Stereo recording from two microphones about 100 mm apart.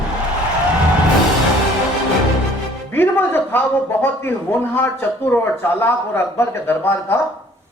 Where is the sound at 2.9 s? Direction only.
20° left (ahead or behind).